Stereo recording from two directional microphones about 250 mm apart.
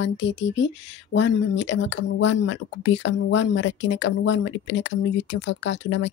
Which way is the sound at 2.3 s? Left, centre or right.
Left.